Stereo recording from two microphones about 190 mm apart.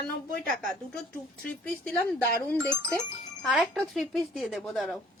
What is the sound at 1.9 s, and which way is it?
A woman's voice, 10° left (ahead or behind).